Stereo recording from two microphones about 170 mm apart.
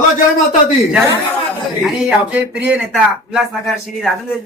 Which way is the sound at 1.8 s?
5° right (ahead or behind).